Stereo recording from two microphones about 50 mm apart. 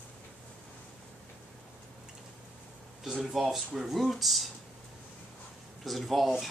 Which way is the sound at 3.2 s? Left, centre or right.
Centre.